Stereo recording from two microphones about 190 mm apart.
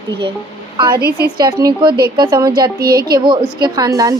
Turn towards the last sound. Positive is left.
turn(degrees=-20)  # may be behind; listen again after turning